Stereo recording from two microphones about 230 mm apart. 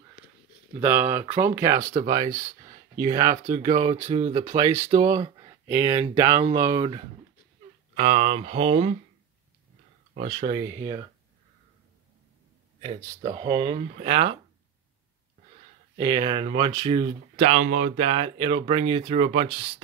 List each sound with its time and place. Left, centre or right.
0.8 s speech: centre
3.5 s speech: right
5.7 s speech: centre
5.9 s speech: right
7.9 s speech: right
10.1 s speech: right
12.8 s speech: right
16.0 s speech: centre